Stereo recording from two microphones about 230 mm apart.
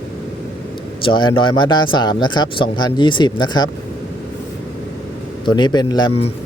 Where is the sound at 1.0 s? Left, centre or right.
Left.